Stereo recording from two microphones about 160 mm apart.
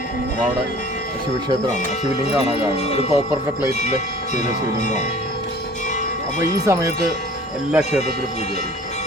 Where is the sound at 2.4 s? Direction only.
40° left (ahead or behind).